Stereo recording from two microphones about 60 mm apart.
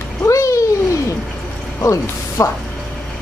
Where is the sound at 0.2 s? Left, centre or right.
Left.